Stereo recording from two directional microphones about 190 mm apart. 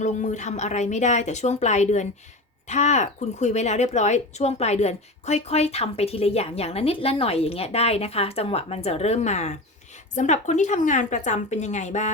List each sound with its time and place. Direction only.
0.0 s speech: 40° left (ahead or behind)